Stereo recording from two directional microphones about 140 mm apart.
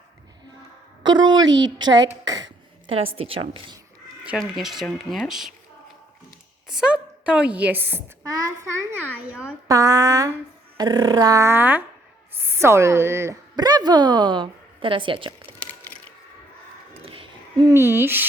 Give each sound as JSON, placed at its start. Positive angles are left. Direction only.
{"t": 1.0, "sound": "a woman's voice", "side_deg": -30}
{"t": 2.2, "sound": "a sound", "side_deg": -30}
{"t": 2.9, "sound": "a woman's voice", "side_deg": -40}
{"t": 4.3, "sound": "speech", "side_deg": 0}
{"t": 6.7, "sound": "a woman's voice", "side_deg": -5}
{"t": 8.3, "sound": "a sound", "side_deg": -25}
{"t": 12.4, "sound": "a woman's voice", "side_deg": -20}
{"t": 17.0, "sound": "a sound", "side_deg": -40}
{"t": 17.7, "sound": "a woman's voice", "side_deg": -15}